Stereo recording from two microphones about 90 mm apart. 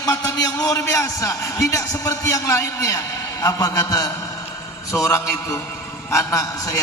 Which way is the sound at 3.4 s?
40° left (ahead or behind).